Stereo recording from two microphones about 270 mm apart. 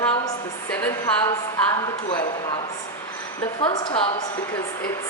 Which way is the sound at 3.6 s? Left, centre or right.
Centre.